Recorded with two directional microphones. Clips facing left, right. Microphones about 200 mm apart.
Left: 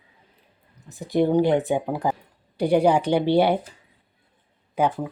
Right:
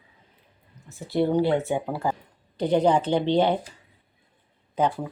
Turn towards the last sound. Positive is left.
turn(degrees=10)  # may be behind; listen again after turning